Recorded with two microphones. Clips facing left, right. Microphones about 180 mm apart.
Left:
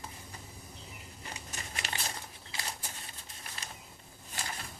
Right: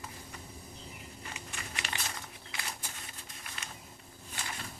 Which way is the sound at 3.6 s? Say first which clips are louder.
Even; 35° left (ahead or behind).